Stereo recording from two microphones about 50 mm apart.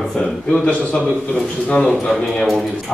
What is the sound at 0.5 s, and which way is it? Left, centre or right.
A man's voice, left.